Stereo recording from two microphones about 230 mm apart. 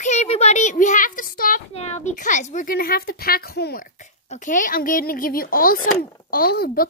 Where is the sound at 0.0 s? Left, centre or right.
Left.